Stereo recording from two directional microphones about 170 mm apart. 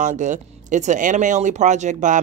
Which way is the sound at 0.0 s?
45° right (ahead or behind).